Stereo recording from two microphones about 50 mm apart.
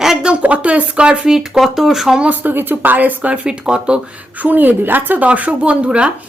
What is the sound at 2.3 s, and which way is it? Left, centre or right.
Speech, right.